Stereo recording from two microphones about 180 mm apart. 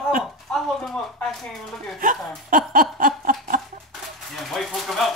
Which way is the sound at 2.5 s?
50° right (ahead or behind).